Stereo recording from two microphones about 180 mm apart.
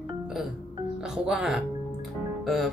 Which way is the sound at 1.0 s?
5° right (ahead or behind).